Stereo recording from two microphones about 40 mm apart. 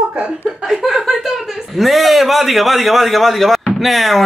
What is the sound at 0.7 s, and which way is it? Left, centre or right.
A man's voice, centre.